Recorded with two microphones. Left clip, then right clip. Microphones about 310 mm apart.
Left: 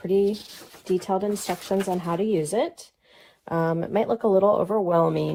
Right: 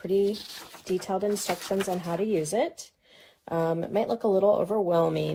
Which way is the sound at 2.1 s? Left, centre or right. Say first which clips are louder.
Left 3 dB; left.